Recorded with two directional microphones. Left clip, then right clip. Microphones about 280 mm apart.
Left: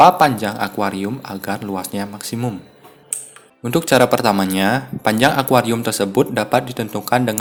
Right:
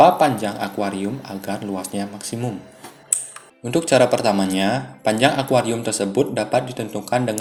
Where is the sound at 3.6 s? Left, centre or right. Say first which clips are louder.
Left 2 dB; left.